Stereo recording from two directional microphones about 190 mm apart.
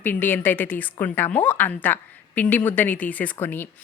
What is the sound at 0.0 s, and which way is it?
A woman's voice, 10° left (ahead or behind).